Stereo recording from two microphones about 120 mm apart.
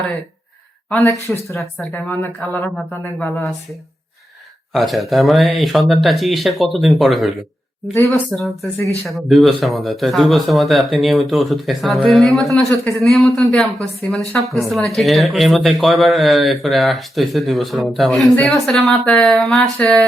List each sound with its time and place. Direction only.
0.9 s speech: 5° left (ahead or behind)
1.9 s speech: 15° left (ahead or behind)
4.7 s speech: centre (ahead or behind)
7.9 s speech: 20° left (ahead or behind)
9.0 s speech: centre (ahead or behind)